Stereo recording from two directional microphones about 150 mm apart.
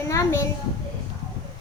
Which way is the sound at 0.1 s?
20° left (ahead or behind).